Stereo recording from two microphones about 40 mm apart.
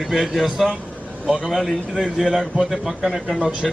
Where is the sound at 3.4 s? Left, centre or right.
Centre.